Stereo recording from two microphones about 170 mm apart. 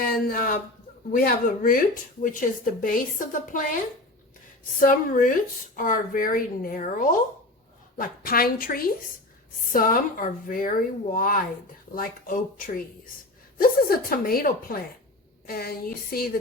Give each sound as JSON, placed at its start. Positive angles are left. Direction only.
{"t": 0.3, "sound": "a woman's voice", "side_deg": 55}
{"t": 4.8, "sound": "a woman's voice", "side_deg": 55}